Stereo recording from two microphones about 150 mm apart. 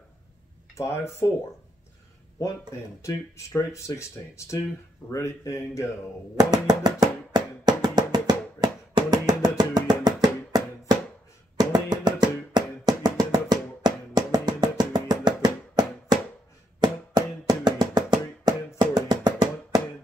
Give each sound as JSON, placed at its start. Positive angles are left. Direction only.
{"t": 0.7, "sound": "speech", "side_deg": 20}
{"t": 3.0, "sound": "speech", "side_deg": 20}
{"t": 6.3, "sound": "music", "side_deg": -25}